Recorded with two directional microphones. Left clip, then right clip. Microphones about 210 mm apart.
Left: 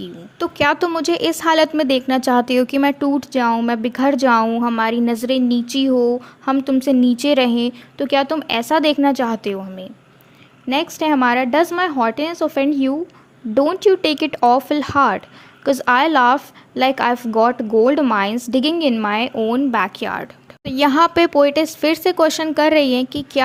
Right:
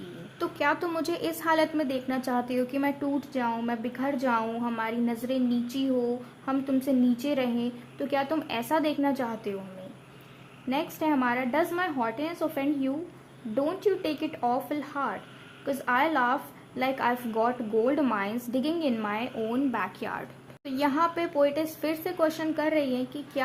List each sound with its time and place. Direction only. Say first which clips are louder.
0.3 s a woman's voice: left 11 dB; 35° left (ahead or behind)
10.7 s a woman's voice: left 10 dB; 35° left (ahead or behind)